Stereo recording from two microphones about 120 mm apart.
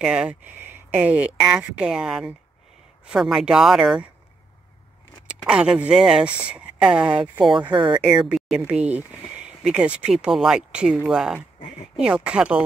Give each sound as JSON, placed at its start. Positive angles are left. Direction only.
{"t": 0.0, "sound": "speech", "side_deg": -10}
{"t": 5.5, "sound": "speech", "side_deg": -10}
{"t": 7.7, "sound": "speech", "side_deg": -40}
{"t": 8.4, "sound": "a sound", "side_deg": -5}
{"t": 8.6, "sound": "speech", "side_deg": -15}